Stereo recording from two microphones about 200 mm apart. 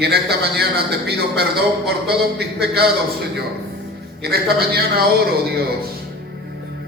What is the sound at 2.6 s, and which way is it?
Speech, 50° right (ahead or behind).